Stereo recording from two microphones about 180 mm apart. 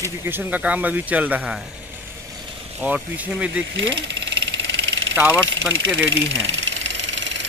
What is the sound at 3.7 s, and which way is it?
Engine, 90° right.